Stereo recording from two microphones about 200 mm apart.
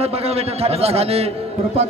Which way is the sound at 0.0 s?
30° right (ahead or behind).